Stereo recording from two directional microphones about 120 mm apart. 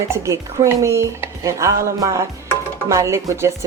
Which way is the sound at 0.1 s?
25° right (ahead or behind).